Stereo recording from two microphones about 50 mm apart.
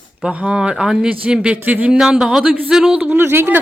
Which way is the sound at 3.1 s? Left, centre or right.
Right.